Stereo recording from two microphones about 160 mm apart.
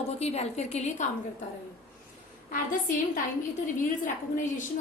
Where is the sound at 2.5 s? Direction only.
55° left (ahead or behind).